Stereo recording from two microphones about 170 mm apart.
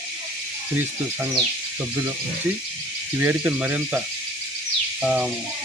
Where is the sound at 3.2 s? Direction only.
10° right (ahead or behind).